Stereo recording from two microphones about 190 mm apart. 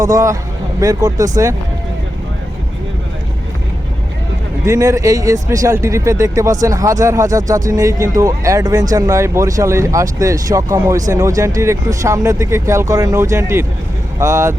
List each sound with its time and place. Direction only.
0.0 s speech: 15° right (ahead or behind)
4.6 s speech: 15° right (ahead or behind)